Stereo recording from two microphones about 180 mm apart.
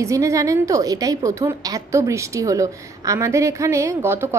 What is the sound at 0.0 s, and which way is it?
A woman's voice, 15° right (ahead or behind).